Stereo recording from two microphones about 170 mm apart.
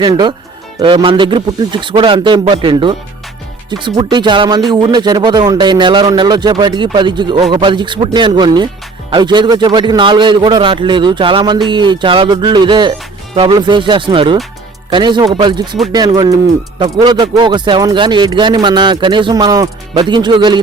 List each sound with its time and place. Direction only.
0.0 s a man's voice: 25° right (ahead or behind)